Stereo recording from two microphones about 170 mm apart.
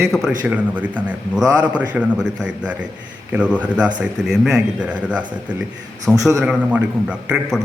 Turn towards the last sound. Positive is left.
turn(degrees=-5)  # may be behind; listen again after turning